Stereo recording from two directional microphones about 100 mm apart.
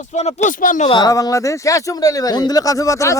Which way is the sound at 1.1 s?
35° left (ahead or behind).